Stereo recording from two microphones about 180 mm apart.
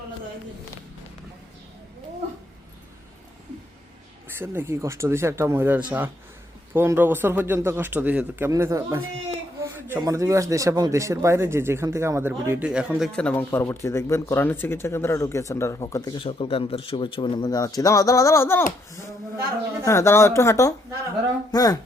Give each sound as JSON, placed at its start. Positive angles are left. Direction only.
{"t": 4.4, "sound": "speech", "side_deg": -15}
{"t": 13.1, "sound": "speech", "side_deg": 10}
{"t": 19.8, "sound": "speech", "side_deg": 15}